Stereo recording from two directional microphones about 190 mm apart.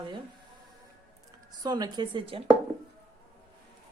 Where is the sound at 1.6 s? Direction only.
20° right (ahead or behind).